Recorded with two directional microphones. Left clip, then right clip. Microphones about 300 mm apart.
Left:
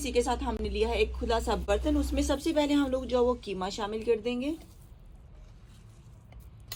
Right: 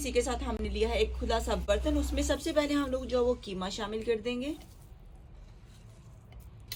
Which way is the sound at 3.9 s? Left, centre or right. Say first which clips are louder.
Left 3 dB; centre.